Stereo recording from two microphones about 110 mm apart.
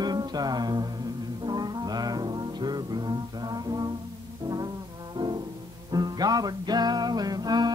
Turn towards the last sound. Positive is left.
turn(degrees=-40)  # may be behind; listen again after turning